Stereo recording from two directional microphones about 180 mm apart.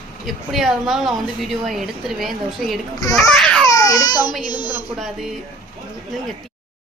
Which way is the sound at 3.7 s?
20° left (ahead or behind).